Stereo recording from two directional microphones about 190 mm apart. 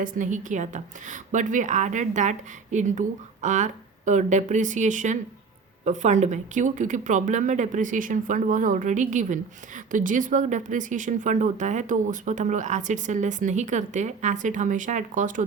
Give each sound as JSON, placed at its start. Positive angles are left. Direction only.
{"t": 0.0, "sound": "speech", "side_deg": -40}